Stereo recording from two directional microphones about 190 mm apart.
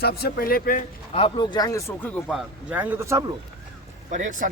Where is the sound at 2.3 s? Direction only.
5° right (ahead or behind).